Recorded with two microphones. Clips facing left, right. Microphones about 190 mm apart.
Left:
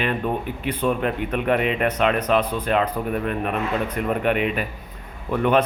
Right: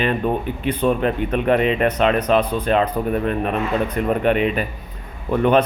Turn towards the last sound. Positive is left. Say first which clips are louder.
# right 3 dB
turn(degrees=-30)  # may be behind; listen again after turning